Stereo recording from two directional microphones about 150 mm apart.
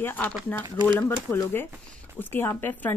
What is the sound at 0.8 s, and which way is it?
Speech, 15° left (ahead or behind).